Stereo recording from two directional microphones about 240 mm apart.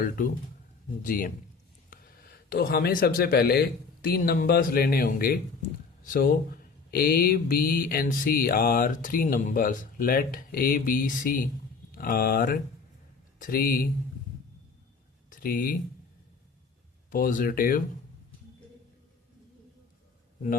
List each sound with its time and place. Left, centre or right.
1.0 s mantra: left
1.9 s speech: left
6.9 s mantra: left
15.3 s speech: left
17.1 s mantra: left